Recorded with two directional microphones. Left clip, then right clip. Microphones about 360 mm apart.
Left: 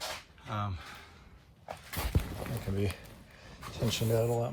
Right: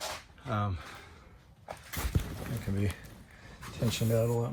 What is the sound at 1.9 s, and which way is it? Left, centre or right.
Dog, left.